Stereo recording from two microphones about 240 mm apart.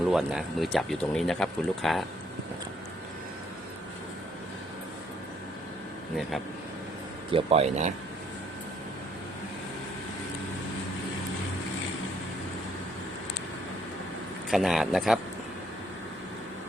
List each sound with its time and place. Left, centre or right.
0.1 s speech: centre
7.3 s speech: right
14.5 s speech: centre